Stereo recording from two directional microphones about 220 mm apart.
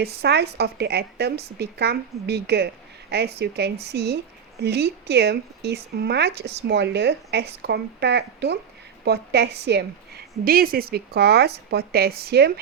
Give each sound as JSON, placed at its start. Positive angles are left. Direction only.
{"t": 0.0, "sound": "a woman's voice", "side_deg": -45}